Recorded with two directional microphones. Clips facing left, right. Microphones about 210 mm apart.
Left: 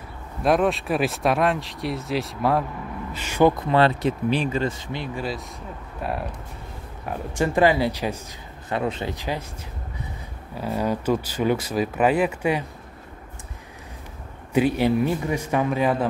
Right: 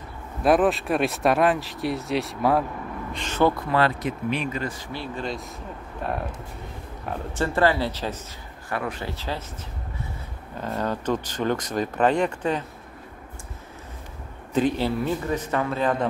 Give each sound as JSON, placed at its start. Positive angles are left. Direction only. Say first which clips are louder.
{"t": 0.4, "sound": "speech", "louder": "right 1 dB", "side_deg": 0}
{"t": 3.6, "sound": "speech", "louder": "left 4 dB", "side_deg": 25}
{"t": 8.6, "sound": "speech", "louder": "left 4 dB", "side_deg": 25}
{"t": 10.6, "sound": "speech", "louder": "left 3 dB", "side_deg": 10}
{"t": 14.5, "sound": "speech", "louder": "left 3 dB", "side_deg": 10}